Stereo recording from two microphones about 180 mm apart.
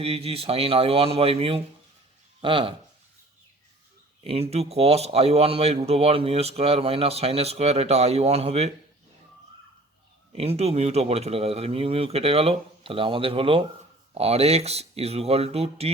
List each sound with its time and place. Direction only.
0.0 s a man's voice: 35° right (ahead or behind)
4.2 s a man's voice: 35° right (ahead or behind)
10.3 s a man's voice: 35° right (ahead or behind)